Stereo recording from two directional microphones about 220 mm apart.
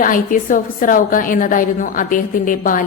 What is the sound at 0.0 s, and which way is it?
A woman's voice, 40° left (ahead or behind).